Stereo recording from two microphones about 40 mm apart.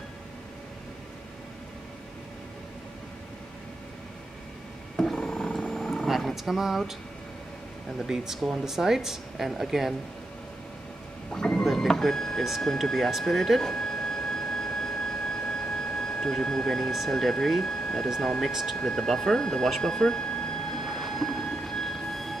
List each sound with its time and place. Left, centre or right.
4.9 s roaring cats: centre
6.0 s wild animals: centre
8.1 s speech: centre
11.3 s mechanisms: centre
11.6 s printer: centre
12.8 s speech: centre
13.6 s a sound: centre
17.1 s speech: centre
18.5 s speech: centre
18.8 s speech: centre
20.7 s train: centre